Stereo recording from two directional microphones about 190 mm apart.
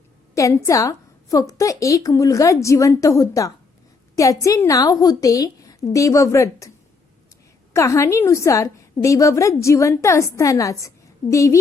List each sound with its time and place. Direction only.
0.3 s a woman's voice: 15° left (ahead or behind)
7.7 s a woman's voice: 15° left (ahead or behind)